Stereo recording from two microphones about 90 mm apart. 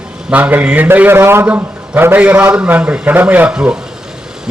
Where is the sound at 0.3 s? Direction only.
20° right (ahead or behind).